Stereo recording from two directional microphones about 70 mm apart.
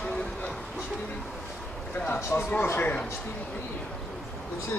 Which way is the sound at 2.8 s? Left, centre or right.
Left.